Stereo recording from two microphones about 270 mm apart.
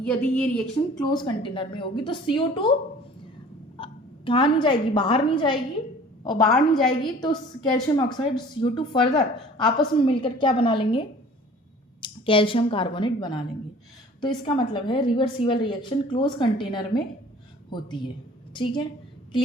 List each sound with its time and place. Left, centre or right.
0.0 s a woman's voice: centre
1.1 s a woman's voice: centre
3.8 s hiccup: centre
4.3 s a woman's voice: centre
6.5 s a woman's voice: centre
7.0 s a woman's voice: centre